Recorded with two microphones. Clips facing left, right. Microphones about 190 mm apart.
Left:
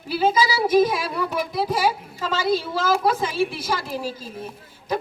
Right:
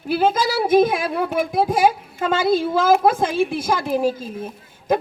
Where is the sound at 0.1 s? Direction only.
55° right (ahead or behind).